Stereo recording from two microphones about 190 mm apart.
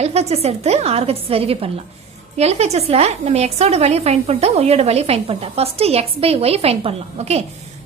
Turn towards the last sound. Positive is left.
turn(degrees=-35)  # may be behind; listen again after turning